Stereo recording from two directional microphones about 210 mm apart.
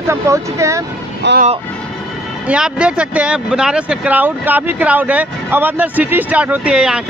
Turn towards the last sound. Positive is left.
turn(degrees=-5)  # may be behind; listen again after turning